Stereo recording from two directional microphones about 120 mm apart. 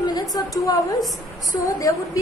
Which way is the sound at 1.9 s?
30° left (ahead or behind).